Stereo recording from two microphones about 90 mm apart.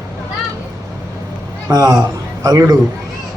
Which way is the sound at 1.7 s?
40° right (ahead or behind).